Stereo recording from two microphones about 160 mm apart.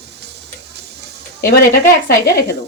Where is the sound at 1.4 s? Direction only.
75° left (ahead or behind).